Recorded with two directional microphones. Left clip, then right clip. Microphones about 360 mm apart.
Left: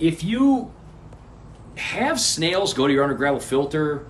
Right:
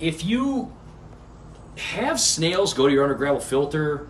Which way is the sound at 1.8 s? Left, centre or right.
Centre.